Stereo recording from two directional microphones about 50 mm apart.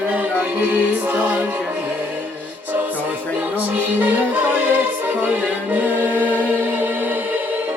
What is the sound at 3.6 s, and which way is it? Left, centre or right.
Music, right.